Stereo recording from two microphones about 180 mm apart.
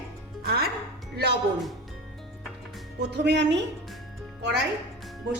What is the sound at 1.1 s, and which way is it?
Speech, 65° right (ahead or behind).